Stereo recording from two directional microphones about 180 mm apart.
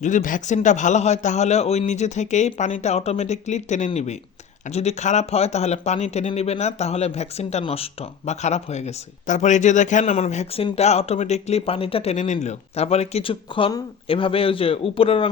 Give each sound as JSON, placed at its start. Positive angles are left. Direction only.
{"t": 0.0, "sound": "speech", "side_deg": 45}